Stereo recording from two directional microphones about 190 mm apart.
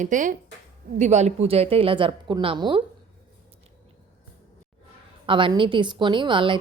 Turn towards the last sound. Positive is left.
turn(degrees=-25)  # may be behind; listen again after turning